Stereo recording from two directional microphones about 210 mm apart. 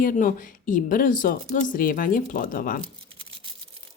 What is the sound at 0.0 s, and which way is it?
Speech, 40° left (ahead or behind).